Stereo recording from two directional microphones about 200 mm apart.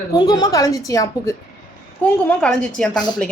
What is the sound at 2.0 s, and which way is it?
A woman's voice, 5° left (ahead or behind).